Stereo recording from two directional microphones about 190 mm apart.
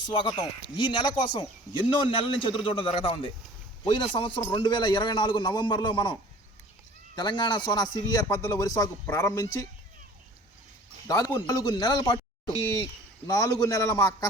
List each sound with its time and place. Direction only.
0.1 s a man's voice: 25° left (ahead or behind)
7.2 s speech: 25° left (ahead or behind)
11.3 s a man's voice: 20° left (ahead or behind)